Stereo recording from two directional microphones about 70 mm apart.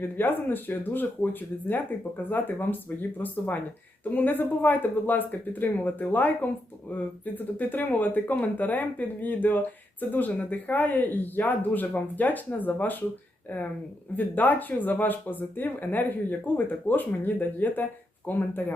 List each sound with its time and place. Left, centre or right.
0.0 s speech: left